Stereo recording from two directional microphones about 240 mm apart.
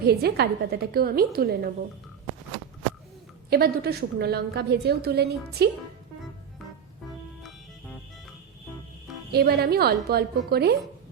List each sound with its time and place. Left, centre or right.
0.0 s a woman's voice: right
3.5 s a woman's voice: right
9.3 s a woman's voice: right